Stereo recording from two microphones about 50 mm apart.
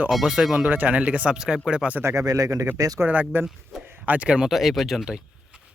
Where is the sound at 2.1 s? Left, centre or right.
Right.